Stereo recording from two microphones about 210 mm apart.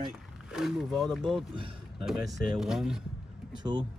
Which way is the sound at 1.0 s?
Centre (ahead or behind).